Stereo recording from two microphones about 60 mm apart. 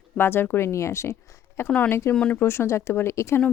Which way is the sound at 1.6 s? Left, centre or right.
Left.